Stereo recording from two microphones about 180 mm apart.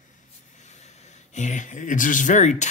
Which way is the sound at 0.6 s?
40° left (ahead or behind).